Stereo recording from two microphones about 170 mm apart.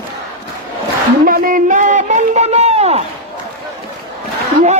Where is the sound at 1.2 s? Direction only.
55° right (ahead or behind); by 3.0 s 40° right (ahead or behind).